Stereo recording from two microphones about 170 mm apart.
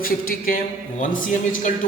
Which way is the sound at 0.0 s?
60° left (ahead or behind).